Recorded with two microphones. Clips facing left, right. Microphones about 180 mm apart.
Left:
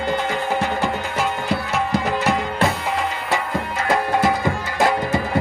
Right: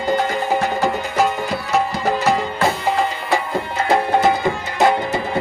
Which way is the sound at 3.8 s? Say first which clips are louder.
Right 3 dB; 25° right (ahead or behind).